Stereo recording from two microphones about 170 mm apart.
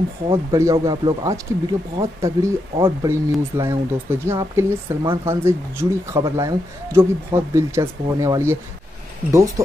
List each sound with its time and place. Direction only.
0.3 s speech: 20° right (ahead or behind)